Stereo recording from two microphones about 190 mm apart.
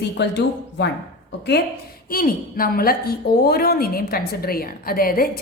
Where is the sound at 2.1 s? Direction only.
50° left (ahead or behind).